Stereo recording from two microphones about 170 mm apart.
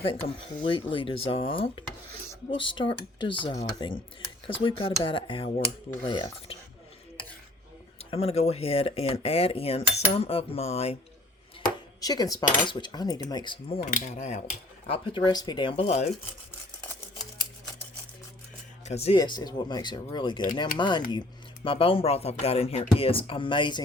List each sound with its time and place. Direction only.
0.6 s speech: 30° left (ahead or behind)
7.9 s speech: 35° left (ahead or behind)
11.9 s speech: 20° left (ahead or behind)
13.8 s speech: 50° left (ahead or behind)
18.9 s speech: 35° left (ahead or behind)
19.1 s speech: 25° left (ahead or behind)